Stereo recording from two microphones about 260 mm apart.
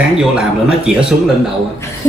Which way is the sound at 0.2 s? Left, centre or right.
Centre.